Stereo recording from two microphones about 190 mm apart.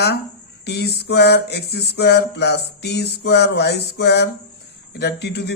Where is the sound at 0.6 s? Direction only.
60° left (ahead or behind).